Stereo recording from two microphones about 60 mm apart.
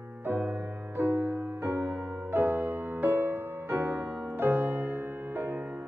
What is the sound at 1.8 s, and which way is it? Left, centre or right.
Music, right.